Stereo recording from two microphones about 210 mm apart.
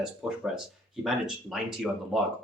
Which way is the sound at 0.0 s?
Centre (ahead or behind).